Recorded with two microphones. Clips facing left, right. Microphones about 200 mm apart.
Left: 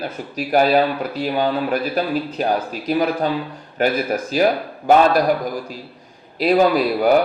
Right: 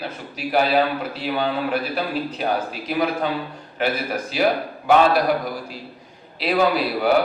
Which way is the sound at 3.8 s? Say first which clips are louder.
Left 4 dB; 45° left (ahead or behind).